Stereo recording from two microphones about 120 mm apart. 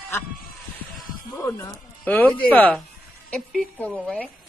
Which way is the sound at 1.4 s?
25° left (ahead or behind).